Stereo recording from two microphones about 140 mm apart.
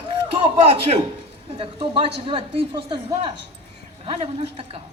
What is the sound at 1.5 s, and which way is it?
A woman's voice, 40° right (ahead or behind).